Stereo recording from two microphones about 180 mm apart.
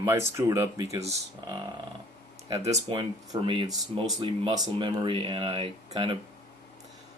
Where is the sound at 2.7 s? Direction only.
25° right (ahead or behind).